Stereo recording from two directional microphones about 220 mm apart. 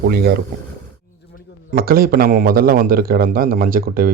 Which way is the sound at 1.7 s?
40° right (ahead or behind).